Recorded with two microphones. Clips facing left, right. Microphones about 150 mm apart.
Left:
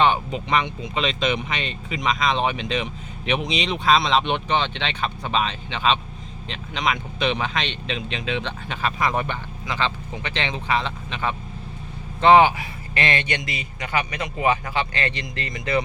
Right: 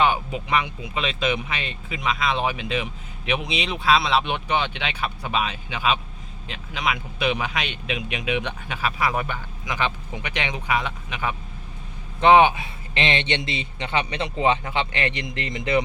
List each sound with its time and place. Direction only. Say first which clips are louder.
0.0 s a man's voice: left 2 dB; 5° right (ahead or behind)